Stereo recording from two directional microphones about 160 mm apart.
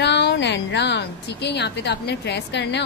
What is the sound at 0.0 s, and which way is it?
Speech, 90° left.